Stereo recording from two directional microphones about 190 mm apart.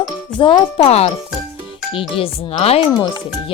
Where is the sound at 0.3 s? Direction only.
25° left (ahead or behind).